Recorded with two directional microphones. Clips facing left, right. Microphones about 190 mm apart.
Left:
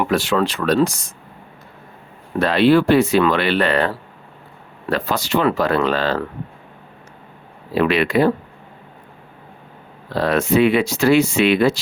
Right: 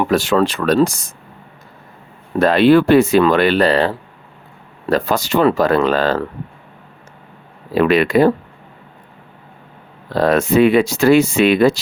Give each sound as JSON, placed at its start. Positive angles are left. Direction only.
{"t": 0.1, "sound": "speech", "side_deg": -40}
{"t": 2.4, "sound": "speech", "side_deg": -50}
{"t": 4.9, "sound": "speech", "side_deg": -45}
{"t": 7.8, "sound": "speech", "side_deg": -45}
{"t": 10.2, "sound": "speech", "side_deg": -45}